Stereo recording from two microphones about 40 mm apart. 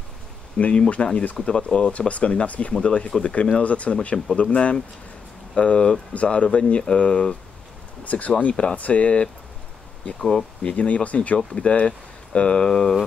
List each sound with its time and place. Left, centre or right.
0.6 s speech: left
8.0 s speech: left
10.6 s speech: left; by 12.9 s centre